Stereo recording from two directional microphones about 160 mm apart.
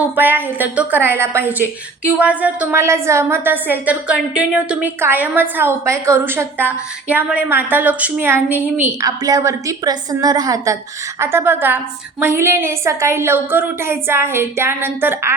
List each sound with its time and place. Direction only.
0.2 s a woman's voice: 10° right (ahead or behind)